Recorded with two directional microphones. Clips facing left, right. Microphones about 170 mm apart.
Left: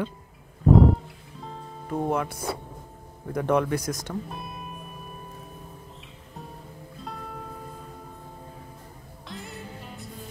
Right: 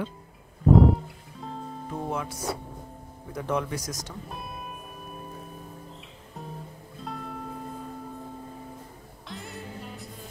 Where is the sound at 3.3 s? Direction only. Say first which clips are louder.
Left 6 dB; 60° left (ahead or behind).